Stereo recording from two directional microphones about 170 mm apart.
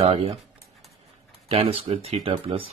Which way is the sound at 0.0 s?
35° right (ahead or behind).